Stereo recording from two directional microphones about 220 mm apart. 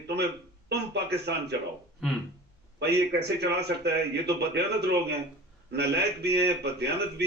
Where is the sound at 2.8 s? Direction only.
50° right (ahead or behind).